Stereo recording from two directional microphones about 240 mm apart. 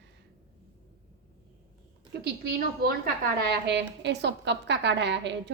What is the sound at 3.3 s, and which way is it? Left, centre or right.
A woman's voice, right.